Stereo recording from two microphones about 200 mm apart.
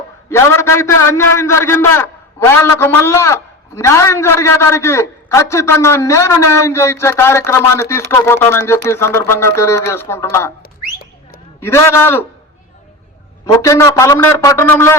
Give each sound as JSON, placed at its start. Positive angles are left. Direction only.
{"t": 0.3, "sound": "a man's voice", "side_deg": 15}
{"t": 10.6, "sound": "whistling", "side_deg": 45}
{"t": 11.6, "sound": "a man's voice", "side_deg": 15}
{"t": 13.4, "sound": "a man's voice", "side_deg": 15}